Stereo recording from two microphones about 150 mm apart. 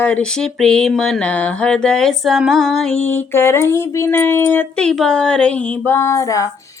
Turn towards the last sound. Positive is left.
turn(degrees=20)  # may be behind; listen again after turning